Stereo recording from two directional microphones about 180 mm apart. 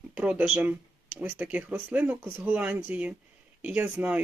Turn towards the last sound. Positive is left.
turn(degrees=-10)  # may be behind; listen again after turning